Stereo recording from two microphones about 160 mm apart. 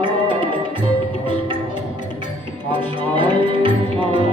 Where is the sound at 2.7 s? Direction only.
30° right (ahead or behind).